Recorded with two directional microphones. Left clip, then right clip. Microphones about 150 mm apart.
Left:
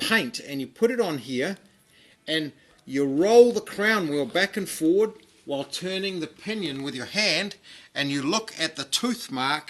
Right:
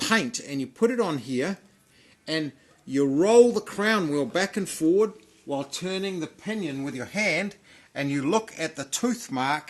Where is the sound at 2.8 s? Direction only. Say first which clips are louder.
Even; 35° right (ahead or behind).